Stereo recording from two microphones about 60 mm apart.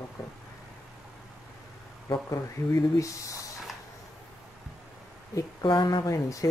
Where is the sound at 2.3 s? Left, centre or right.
Left.